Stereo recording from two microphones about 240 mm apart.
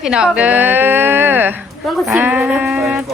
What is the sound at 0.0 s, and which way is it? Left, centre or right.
A woman's voice, centre.